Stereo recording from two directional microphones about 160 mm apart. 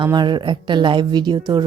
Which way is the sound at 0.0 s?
25° right (ahead or behind).